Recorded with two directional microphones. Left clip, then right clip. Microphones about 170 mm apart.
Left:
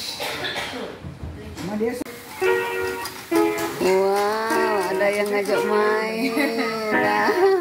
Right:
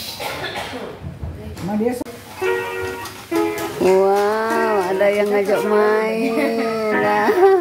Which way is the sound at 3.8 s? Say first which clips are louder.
Right 6 dB; 15° right (ahead or behind).